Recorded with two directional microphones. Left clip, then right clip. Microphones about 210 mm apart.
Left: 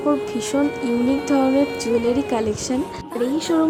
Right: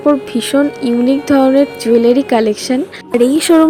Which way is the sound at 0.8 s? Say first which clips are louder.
Right 7 dB; centre (ahead or behind).